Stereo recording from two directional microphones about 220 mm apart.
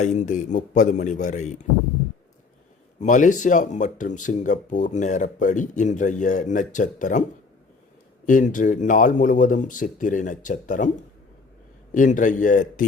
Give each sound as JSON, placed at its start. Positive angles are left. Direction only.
{"t": 0.0, "sound": "speech", "side_deg": 35}
{"t": 3.0, "sound": "speech", "side_deg": 35}
{"t": 8.3, "sound": "speech", "side_deg": 35}